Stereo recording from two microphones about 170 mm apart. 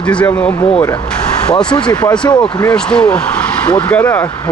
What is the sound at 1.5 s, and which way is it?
Speech, 25° left (ahead or behind).